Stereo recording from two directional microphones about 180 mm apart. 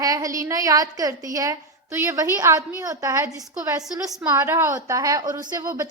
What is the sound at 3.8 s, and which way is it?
Speech, 5° right (ahead or behind).